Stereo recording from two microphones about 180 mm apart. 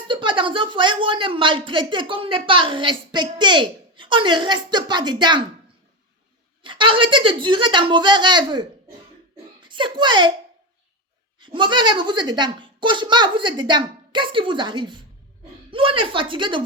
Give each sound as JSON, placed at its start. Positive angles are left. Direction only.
{"t": 0.1, "sound": "a woman's voice", "side_deg": -25}
{"t": 6.6, "sound": "a woman's voice", "side_deg": -25}
{"t": 9.3, "sound": "a sound", "side_deg": -25}
{"t": 11.3, "sound": "a woman's voice", "side_deg": -25}